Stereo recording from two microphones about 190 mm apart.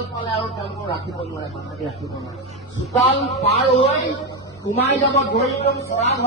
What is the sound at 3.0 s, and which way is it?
A woman's voice, 30° left (ahead or behind).